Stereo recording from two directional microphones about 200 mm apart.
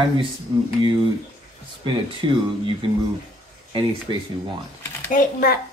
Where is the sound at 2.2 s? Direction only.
25° right (ahead or behind).